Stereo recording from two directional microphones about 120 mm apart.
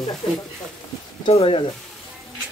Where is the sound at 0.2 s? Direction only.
50° left (ahead or behind).